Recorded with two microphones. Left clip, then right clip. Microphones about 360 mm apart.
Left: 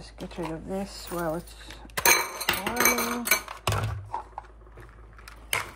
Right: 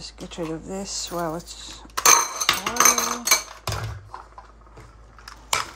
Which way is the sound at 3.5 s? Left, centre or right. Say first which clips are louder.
Left 2 dB; left.